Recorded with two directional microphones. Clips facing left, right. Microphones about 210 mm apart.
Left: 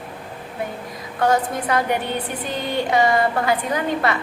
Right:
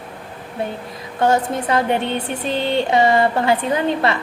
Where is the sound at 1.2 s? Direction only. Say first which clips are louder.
Right 2 dB; 25° right (ahead or behind).